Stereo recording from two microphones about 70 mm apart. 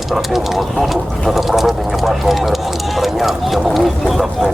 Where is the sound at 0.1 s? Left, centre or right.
Centre.